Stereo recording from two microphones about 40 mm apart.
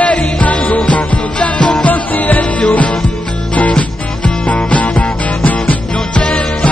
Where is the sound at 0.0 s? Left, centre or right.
Left.